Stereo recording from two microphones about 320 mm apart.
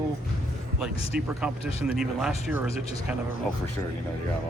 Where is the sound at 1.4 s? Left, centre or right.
Centre.